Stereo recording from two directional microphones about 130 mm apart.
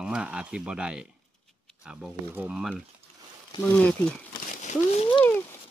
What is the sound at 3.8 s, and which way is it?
Speech, 10° left (ahead or behind).